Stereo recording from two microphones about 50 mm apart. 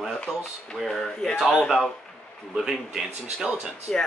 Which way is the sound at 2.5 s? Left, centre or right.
Centre.